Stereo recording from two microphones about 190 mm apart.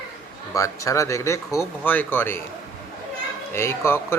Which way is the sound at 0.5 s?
15° left (ahead or behind).